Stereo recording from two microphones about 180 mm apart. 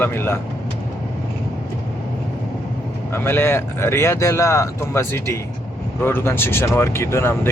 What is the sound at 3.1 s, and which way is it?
Speech, 15° left (ahead or behind).